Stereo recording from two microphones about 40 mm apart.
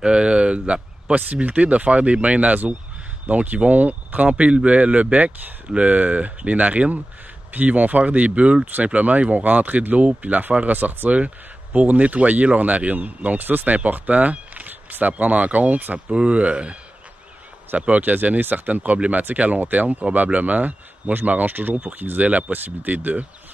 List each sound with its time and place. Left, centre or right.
0.0 s speech: right
1.1 s speech: right
4.3 s speech: right
11.1 s speech: right
13.4 s speech: right
17.7 s speech: right
18.7 s speech: right
21.7 s speech: right